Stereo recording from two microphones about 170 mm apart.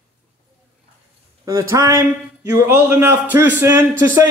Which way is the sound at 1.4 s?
20° right (ahead or behind).